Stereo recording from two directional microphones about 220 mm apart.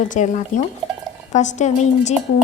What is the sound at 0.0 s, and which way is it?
A woman's voice, 35° left (ahead or behind).